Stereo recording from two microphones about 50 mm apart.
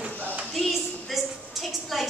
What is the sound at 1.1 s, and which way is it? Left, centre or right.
Speech, centre.